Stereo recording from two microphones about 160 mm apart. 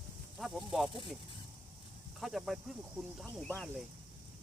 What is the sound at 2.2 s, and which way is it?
Speech, centre (ahead or behind).